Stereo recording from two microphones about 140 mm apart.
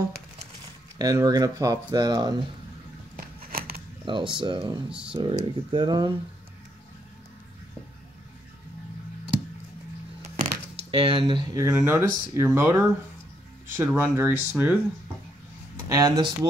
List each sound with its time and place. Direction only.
0.9 s speech: 25° right (ahead or behind)
3.2 s a sound: 90° right
4.0 s speech: 35° right (ahead or behind)
4.8 s speech: 5° right (ahead or behind)
5.1 s speech: 35° right (ahead or behind)
10.4 s a sound: 40° right (ahead or behind)
11.5 s speech: 20° right (ahead or behind)
13.7 s speech: 15° right (ahead or behind)
15.9 s speech: 30° right (ahead or behind)